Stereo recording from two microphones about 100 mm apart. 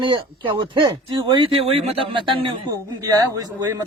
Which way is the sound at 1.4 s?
75° right (ahead or behind).